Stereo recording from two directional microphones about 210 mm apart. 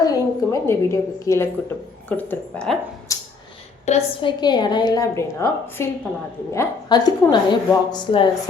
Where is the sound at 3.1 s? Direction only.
15° left (ahead or behind).